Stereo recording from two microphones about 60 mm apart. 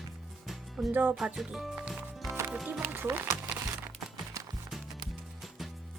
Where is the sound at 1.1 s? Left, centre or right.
Centre.